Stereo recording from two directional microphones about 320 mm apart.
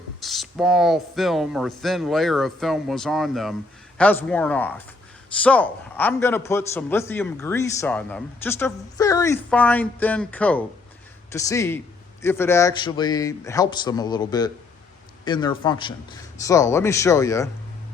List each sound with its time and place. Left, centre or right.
0.2 s a man's voice: centre